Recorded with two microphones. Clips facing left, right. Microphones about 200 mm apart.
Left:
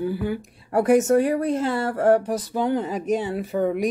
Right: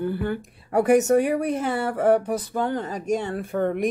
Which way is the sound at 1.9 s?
5° left (ahead or behind).